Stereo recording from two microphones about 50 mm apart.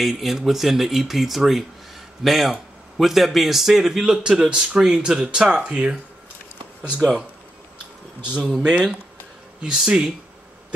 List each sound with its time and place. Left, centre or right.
0.2 s speech: centre; by 5.9 s right
8.4 s speech: centre